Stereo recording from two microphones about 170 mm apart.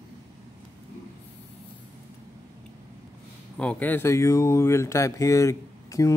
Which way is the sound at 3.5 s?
10° left (ahead or behind).